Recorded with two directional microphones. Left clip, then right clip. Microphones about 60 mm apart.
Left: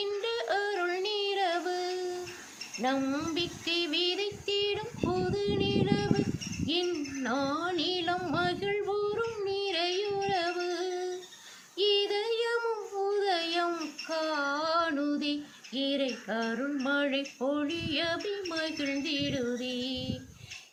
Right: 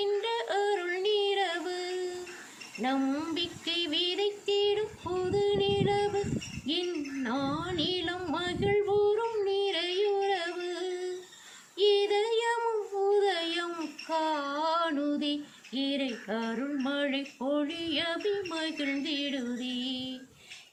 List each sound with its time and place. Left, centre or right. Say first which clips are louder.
0.0 s yodeling: right 2 dB; left
2.8 s a sound: even; left
11.8 s female singing: right 2 dB; left
13.0 s child singing: right 2 dB; left
14.1 s female singing: right 1 dB; left
16.8 s a sound: left 3 dB; left